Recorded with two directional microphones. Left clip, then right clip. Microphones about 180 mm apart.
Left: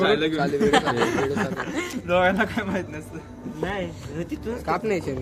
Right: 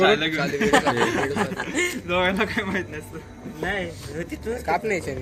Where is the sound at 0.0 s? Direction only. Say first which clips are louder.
Right 2 dB; 15° right (ahead or behind).